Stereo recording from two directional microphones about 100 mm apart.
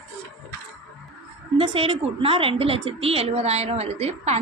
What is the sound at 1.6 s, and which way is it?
A woman's voice, 60° right (ahead or behind).